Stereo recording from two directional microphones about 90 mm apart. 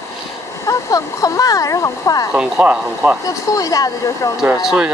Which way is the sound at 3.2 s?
40° left (ahead or behind).